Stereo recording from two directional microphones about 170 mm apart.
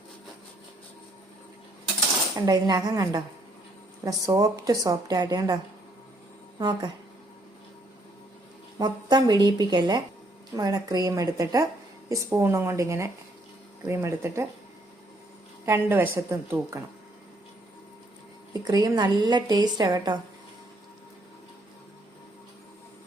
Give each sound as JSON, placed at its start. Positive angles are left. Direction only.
{"t": 2.3, "sound": "a woman's voice", "side_deg": -25}
{"t": 4.3, "sound": "a woman's voice", "side_deg": -20}
{"t": 6.6, "sound": "a woman's voice", "side_deg": -25}
{"t": 8.8, "sound": "a woman's voice", "side_deg": -25}
{"t": 15.6, "sound": "speech", "side_deg": -15}
{"t": 18.7, "sound": "a woman's voice", "side_deg": -25}